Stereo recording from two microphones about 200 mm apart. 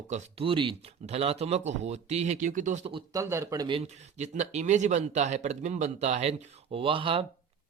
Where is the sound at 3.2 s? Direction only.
15° right (ahead or behind).